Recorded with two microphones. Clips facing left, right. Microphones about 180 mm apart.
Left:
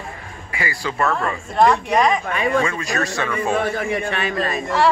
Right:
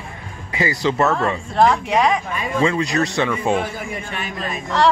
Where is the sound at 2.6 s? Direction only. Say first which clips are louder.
Right 4 dB; 20° right (ahead or behind).